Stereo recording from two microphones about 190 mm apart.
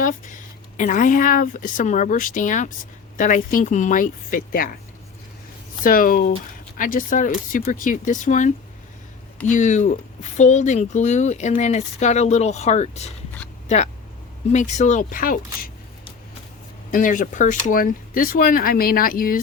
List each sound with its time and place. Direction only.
0.0 s a sound: 45° left (ahead or behind)
0.8 s speech: 45° left (ahead or behind)
5.8 s speech: 45° left (ahead or behind)
16.9 s speech: 45° left (ahead or behind)